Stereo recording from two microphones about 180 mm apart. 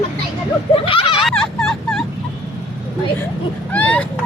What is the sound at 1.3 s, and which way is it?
Fowl, centre (ahead or behind).